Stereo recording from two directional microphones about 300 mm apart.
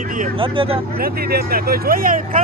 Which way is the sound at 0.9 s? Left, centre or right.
Right.